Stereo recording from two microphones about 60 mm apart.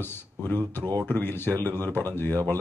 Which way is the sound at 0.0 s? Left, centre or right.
Left.